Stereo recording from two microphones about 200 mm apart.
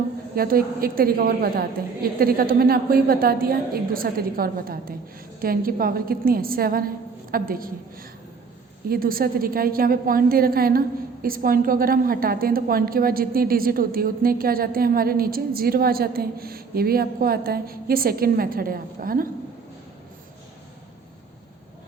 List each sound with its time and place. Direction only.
0.3 s a woman's voice: 45° right (ahead or behind)